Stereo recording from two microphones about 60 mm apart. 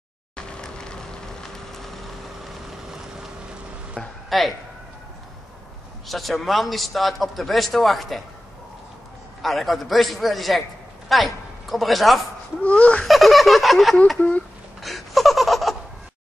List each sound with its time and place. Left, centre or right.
0.4 s vehicle: centre
4.0 s speech: centre
4.3 s speech: centre
6.0 s a man's voice: centre
9.4 s a man's voice: centre
12.6 s a sound: left
13.0 s a man's voice: centre
14.8 s laughter: centre